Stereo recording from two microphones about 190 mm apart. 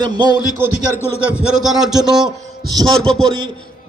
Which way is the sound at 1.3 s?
5° right (ahead or behind).